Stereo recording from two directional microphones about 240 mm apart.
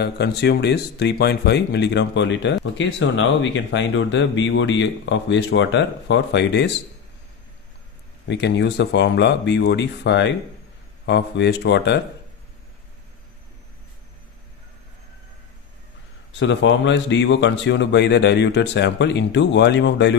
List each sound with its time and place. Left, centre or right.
0.0 s speech: left
8.3 s speech: left
16.3 s speech: left